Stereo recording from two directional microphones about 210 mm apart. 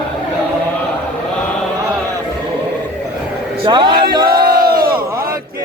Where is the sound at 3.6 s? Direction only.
25° right (ahead or behind).